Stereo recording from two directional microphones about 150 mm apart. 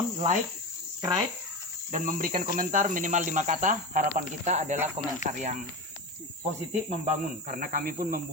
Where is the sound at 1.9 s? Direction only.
60° right (ahead or behind).